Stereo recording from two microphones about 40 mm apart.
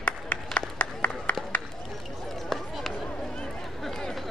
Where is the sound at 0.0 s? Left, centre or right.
Left.